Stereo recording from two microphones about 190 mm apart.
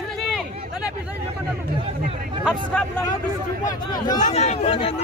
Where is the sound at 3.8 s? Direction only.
20° left (ahead or behind).